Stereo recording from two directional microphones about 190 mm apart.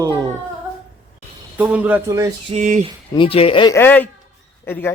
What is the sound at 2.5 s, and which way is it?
Speech, 40° right (ahead or behind).